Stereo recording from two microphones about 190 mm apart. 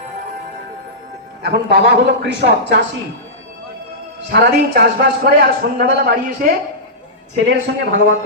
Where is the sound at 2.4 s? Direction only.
60° right (ahead or behind).